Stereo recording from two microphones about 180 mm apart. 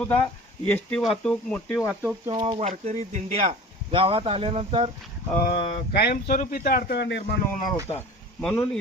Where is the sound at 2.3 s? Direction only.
30° right (ahead or behind).